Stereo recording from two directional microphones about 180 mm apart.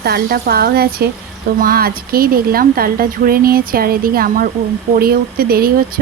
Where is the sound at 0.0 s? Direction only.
55° right (ahead or behind).